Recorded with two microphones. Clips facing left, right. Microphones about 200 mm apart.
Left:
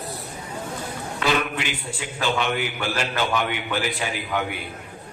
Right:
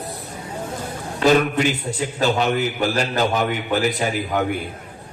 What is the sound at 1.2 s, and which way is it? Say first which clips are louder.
A man's voice: right 8 dB; 40° right (ahead or behind).